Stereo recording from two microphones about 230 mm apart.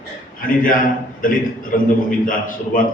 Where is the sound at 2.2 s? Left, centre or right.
Left.